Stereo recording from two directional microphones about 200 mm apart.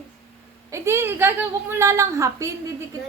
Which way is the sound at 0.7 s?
15° right (ahead or behind).